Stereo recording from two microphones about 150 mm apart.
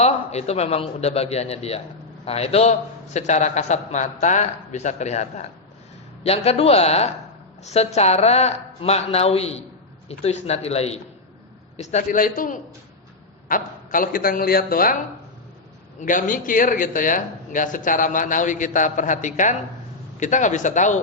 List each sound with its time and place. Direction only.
0.0 s a man's voice: 45° left (ahead or behind); by 14.9 s 75° left (ahead or behind)
16.0 s a man's voice: 60° left (ahead or behind)